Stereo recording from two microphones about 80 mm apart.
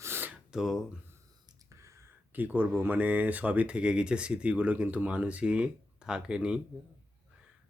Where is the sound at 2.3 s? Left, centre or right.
Right.